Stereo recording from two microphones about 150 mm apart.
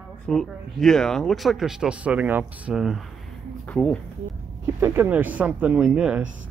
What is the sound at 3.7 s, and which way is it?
Speech, 10° left (ahead or behind).